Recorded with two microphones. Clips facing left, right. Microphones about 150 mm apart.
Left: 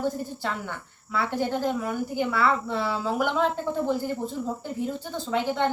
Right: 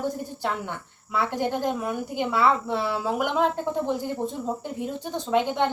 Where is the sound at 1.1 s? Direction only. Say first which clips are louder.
Right 1 dB; 15° right (ahead or behind).